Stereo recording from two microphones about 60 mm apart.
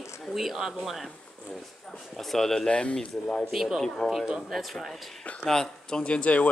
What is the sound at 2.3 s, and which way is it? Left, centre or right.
Speech, centre.